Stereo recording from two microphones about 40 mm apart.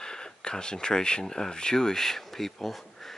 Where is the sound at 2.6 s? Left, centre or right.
Centre.